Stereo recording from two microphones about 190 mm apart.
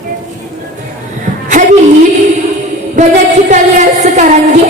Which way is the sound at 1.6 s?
45° right (ahead or behind).